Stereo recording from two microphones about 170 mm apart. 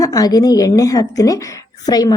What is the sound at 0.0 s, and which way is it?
A woman's voice, 20° left (ahead or behind).